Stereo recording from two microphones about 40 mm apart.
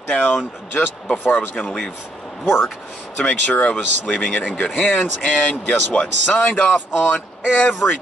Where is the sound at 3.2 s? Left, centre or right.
Left.